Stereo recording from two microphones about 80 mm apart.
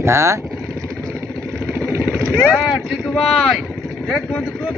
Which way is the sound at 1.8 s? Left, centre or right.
Right.